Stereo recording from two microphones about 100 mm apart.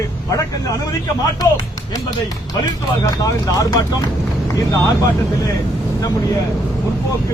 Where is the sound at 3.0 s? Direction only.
35° left (ahead or behind).